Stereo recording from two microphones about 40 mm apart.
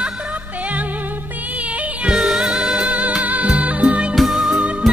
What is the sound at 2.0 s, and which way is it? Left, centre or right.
Music, right.